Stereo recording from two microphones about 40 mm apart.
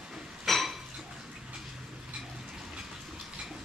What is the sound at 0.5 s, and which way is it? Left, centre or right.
Dishes, centre.